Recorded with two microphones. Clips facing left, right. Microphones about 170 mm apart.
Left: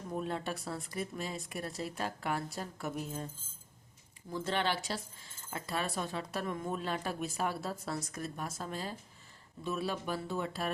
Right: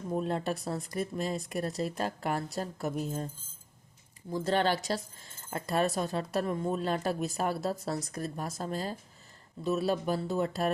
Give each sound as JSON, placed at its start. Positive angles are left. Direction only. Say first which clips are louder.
{"t": 0.1, "sound": "a woman's voice", "louder": "right 5 dB", "side_deg": -35}
{"t": 4.3, "sound": "a woman's voice", "louder": "right 6 dB", "side_deg": -40}